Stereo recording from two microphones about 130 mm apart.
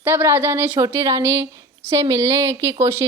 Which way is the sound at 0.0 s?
15° right (ahead or behind).